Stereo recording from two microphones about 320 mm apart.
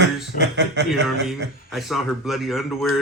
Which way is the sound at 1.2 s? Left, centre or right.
Centre.